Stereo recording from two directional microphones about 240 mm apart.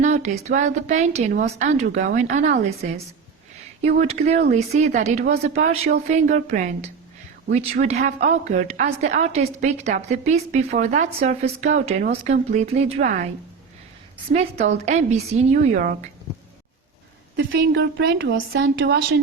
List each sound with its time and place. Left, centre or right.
0.0 s a woman's voice: right
14.3 s a woman's voice: right
17.3 s a woman's voice: right